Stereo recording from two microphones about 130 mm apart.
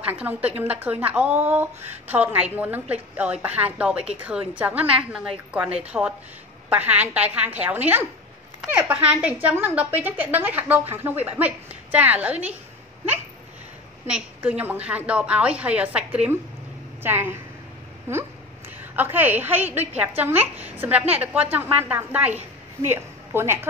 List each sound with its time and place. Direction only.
0.0 s a woman's voice: 10° right (ahead or behind)
14.0 s a woman's voice: 10° right (ahead or behind)
18.9 s a woman's voice: 15° right (ahead or behind)